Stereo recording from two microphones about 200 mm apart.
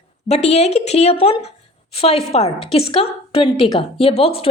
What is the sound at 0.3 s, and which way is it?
A woman's voice, 30° left (ahead or behind).